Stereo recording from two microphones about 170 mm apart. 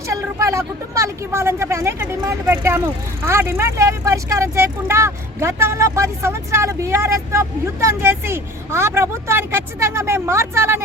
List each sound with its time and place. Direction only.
0.1 s speech: 20° right (ahead or behind)